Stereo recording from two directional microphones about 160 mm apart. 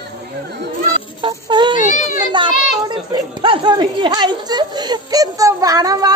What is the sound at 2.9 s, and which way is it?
Speech, 30° right (ahead or behind).